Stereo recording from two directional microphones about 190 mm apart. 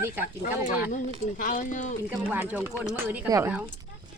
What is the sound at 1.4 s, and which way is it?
Speech, 45° left (ahead or behind).